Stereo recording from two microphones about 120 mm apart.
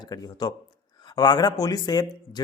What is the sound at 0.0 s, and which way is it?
A man's voice, 35° left (ahead or behind).